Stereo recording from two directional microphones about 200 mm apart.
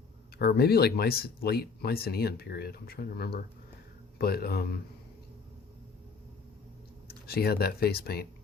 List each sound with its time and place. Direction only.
0.3 s speech: 50° left (ahead or behind)
7.3 s speech: 50° left (ahead or behind)